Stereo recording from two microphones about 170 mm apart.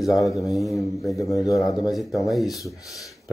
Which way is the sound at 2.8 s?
20° left (ahead or behind).